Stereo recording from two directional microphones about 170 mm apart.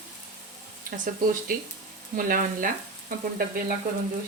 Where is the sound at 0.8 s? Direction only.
55° right (ahead or behind).